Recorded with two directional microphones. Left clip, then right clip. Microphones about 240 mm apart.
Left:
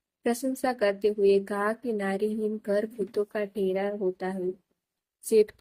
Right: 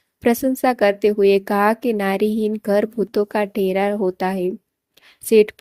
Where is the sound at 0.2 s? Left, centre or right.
Right.